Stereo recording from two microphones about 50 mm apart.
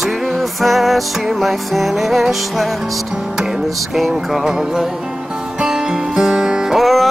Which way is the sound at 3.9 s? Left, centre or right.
Centre.